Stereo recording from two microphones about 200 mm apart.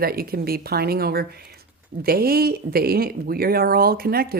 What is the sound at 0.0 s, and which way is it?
Speech, 50° right (ahead or behind).